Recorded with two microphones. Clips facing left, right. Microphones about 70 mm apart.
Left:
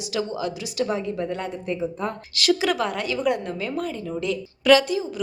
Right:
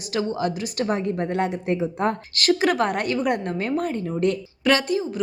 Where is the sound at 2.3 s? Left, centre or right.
Right.